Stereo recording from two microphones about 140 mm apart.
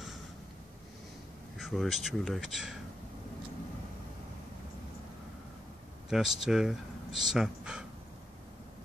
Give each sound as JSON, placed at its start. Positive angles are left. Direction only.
{"t": 1.6, "sound": "speech", "side_deg": 0}
{"t": 6.0, "sound": "speech", "side_deg": -5}